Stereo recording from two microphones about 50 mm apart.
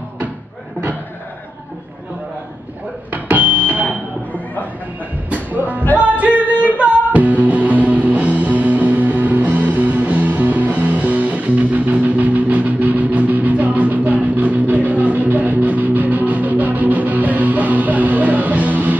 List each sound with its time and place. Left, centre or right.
3.1 s music: right
5.3 s music: right